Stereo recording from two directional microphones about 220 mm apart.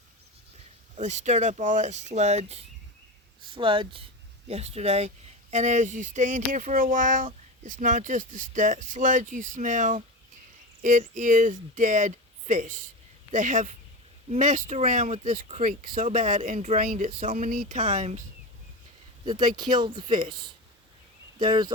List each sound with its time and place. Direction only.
0.9 s speech: 30° right (ahead or behind)
19.5 s speech: 20° right (ahead or behind)